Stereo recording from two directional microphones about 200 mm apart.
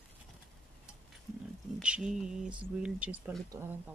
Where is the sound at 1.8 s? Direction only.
5° right (ahead or behind).